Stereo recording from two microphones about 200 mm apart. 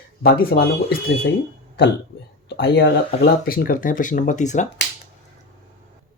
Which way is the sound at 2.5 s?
55° left (ahead or behind).